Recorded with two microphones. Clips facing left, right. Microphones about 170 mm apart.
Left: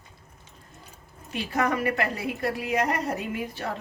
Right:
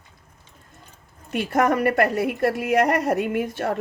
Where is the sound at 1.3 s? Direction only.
60° right (ahead or behind).